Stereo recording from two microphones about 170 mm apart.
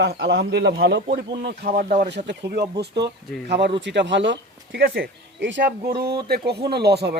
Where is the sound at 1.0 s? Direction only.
55° right (ahead or behind).